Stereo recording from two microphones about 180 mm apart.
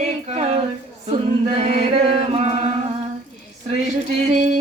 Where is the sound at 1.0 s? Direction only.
40° right (ahead or behind).